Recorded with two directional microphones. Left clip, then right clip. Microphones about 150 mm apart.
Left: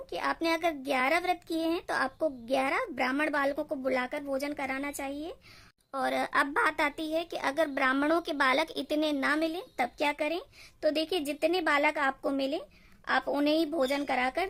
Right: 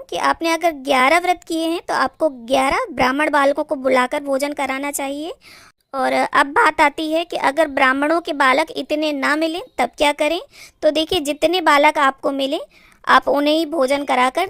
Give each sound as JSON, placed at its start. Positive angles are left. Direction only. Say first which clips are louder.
{"t": 0.1, "sound": "a child's voice", "louder": "right 12 dB", "side_deg": -35}